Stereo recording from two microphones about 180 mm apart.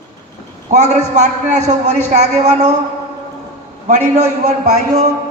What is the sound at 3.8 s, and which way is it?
Speech, 40° right (ahead or behind).